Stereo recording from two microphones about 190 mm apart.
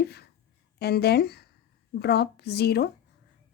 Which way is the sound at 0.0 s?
60° left (ahead or behind).